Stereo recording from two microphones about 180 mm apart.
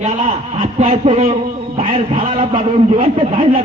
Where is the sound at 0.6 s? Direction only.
35° right (ahead or behind).